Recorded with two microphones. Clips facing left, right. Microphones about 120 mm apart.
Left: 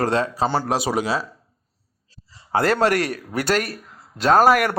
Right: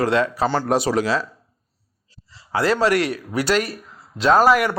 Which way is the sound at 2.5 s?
55° left (ahead or behind).